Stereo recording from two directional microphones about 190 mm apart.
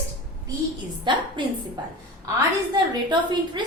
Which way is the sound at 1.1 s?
25° right (ahead or behind).